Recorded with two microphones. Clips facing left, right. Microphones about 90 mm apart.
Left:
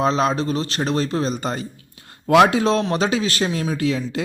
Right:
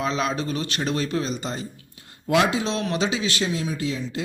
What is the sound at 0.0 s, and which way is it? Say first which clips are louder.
Speech: left 6 dB; 35° left (ahead or behind).